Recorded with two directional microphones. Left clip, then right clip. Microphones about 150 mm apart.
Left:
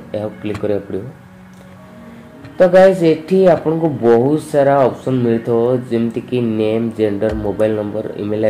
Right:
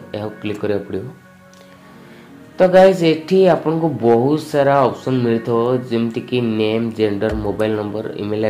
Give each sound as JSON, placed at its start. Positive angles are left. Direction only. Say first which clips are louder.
{"t": 0.1, "sound": "speech", "louder": "left 3 dB", "side_deg": -10}
{"t": 2.6, "sound": "speech", "louder": "left 2 dB", "side_deg": -20}